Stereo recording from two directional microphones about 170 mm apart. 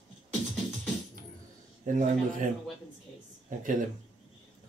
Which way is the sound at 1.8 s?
50° right (ahead or behind).